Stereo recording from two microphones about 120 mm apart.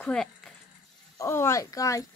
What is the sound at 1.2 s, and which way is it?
Speech, 20° left (ahead or behind).